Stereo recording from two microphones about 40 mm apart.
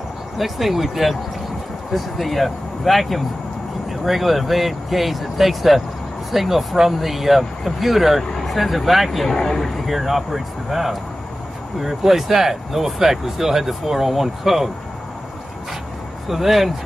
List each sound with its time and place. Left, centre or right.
0.4 s speech: centre
9.4 s speech: centre
9.8 s speech: centre
16.3 s speech: centre